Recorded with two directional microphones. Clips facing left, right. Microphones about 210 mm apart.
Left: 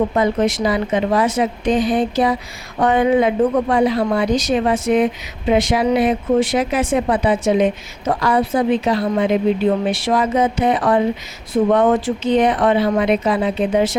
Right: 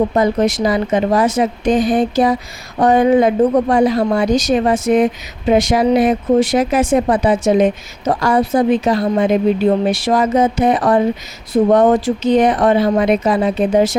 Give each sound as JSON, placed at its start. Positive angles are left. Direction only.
{"t": 0.1, "sound": "speech", "side_deg": -40}